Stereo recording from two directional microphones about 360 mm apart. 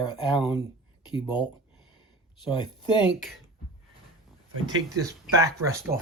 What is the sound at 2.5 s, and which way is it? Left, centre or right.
Speech, centre.